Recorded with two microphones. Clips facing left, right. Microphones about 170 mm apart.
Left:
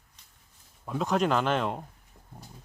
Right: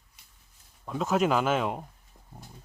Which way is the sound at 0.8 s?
Centre (ahead or behind).